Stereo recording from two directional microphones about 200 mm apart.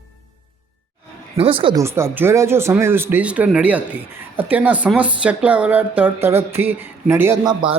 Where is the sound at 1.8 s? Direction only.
15° right (ahead or behind).